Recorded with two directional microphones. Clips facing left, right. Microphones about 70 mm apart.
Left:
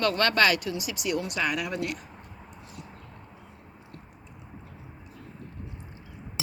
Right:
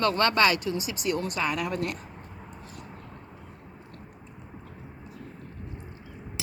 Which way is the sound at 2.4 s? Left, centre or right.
Right.